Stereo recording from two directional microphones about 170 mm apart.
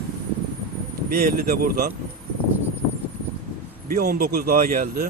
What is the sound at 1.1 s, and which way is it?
Speech, 65° right (ahead or behind).